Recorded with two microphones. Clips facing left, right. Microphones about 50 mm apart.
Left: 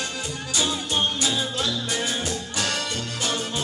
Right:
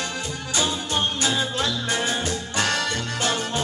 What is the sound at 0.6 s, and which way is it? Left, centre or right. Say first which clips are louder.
Music: even; right.